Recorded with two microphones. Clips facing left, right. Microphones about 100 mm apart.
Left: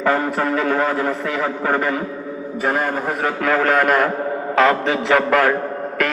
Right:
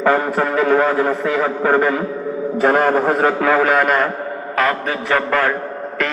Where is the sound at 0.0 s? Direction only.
20° right (ahead or behind).